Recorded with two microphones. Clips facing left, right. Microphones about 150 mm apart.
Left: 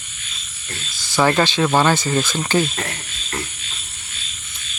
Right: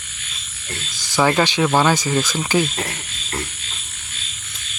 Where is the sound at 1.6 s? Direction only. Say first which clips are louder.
Even; 5° right (ahead or behind).